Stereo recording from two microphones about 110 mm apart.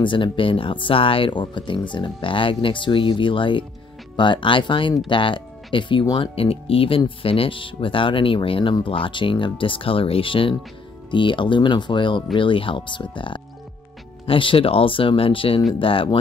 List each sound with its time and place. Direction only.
0.0 s speech: 50° left (ahead or behind)